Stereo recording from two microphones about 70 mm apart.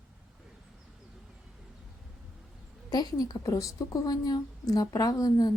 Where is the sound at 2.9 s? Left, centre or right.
Left.